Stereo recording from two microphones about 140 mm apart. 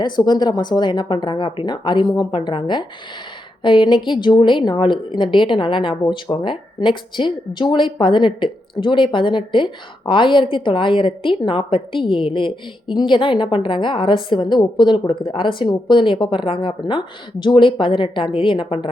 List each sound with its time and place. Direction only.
0.0 s speech: 30° left (ahead or behind)